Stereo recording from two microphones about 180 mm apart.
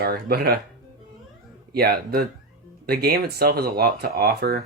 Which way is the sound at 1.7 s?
60° right (ahead or behind).